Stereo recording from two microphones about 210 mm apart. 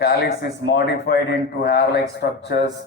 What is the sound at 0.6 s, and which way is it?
Speech, 50° left (ahead or behind).